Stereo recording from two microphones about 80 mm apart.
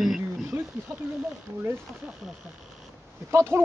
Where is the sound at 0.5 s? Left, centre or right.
Right.